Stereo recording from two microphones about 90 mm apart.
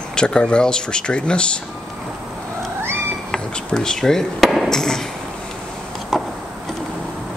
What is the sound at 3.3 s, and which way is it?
Speech, 10° left (ahead or behind).